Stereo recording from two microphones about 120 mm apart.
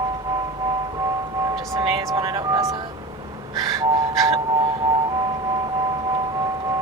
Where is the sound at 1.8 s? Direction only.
40° right (ahead or behind).